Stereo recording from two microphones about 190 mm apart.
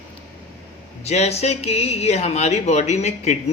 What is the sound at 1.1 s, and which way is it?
Speech, 35° left (ahead or behind).